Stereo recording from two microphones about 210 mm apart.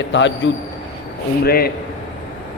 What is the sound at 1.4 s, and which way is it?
Speech, 45° left (ahead or behind).